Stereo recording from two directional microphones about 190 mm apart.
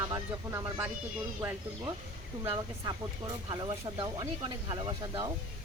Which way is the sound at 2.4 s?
30° right (ahead or behind).